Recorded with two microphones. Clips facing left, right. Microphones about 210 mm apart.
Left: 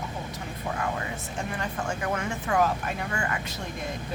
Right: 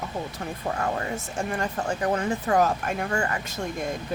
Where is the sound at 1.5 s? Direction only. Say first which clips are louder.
Right 4 dB; 40° right (ahead or behind).